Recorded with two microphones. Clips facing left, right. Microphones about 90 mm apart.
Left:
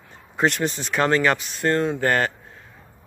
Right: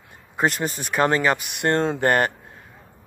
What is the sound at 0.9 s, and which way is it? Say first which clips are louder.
Speech: even; 20° right (ahead or behind).